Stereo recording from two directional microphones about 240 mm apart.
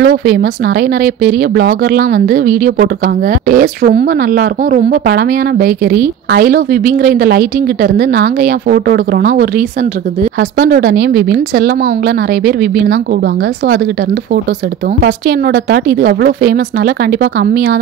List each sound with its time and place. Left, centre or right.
0.0 s speech: right
15.0 s speech: right